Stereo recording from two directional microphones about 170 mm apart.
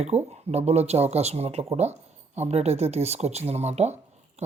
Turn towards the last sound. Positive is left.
turn(degrees=-40)  # may be behind; listen again after turning